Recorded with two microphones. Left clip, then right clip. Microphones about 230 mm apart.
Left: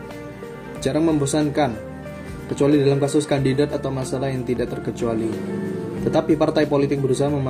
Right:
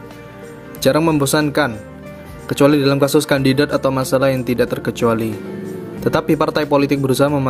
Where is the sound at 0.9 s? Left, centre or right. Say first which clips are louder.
Right 6 dB; right.